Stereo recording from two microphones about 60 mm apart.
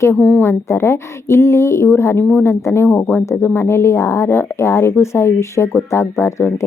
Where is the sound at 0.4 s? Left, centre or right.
Left.